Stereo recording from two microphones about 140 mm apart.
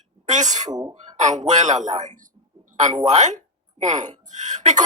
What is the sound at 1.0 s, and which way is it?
A woman's voice, 60° right (ahead or behind).